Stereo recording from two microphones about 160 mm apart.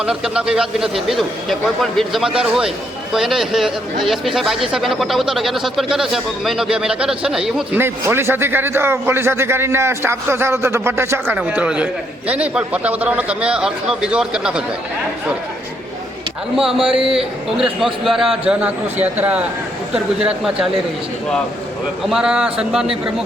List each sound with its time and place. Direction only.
0.0 s a man's voice: 5° right (ahead or behind)
16.6 s a man's voice: 5° right (ahead or behind)
17.0 s a man's voice: 35° right (ahead or behind)
17.6 s a man's voice: centre (ahead or behind)
22.1 s a man's voice: 5° right (ahead or behind)